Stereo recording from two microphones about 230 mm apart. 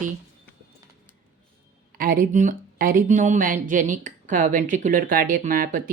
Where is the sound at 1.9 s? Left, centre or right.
Right.